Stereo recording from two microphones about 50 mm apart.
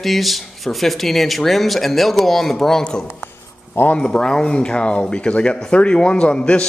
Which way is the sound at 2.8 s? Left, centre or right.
Centre.